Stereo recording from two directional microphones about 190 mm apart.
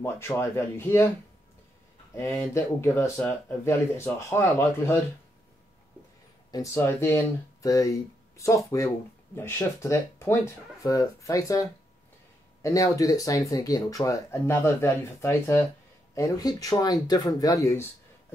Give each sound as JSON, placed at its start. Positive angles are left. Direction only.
{"t": 0.0, "sound": "speech", "side_deg": 15}
{"t": 2.1, "sound": "speech", "side_deg": 15}
{"t": 6.5, "sound": "speech", "side_deg": 15}
{"t": 12.6, "sound": "speech", "side_deg": 15}